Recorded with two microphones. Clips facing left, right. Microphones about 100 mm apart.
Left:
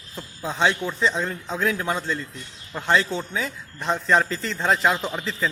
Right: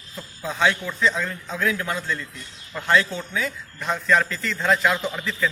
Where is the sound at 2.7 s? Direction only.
25° left (ahead or behind).